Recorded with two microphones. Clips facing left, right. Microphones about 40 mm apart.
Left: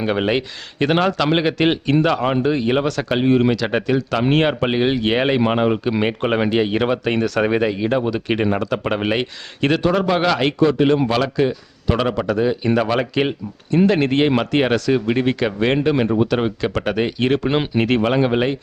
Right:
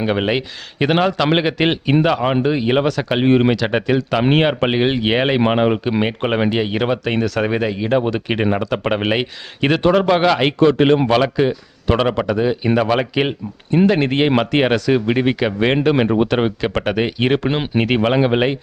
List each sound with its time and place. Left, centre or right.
0.0 s speech: centre
3.2 s a man's voice: right
3.5 s speech: centre
7.9 s a man's voice: centre
10.6 s speech: right
11.1 s a man's voice: centre